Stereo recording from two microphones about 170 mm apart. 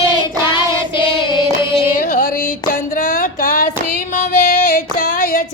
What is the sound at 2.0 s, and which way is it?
Music, 50° left (ahead or behind).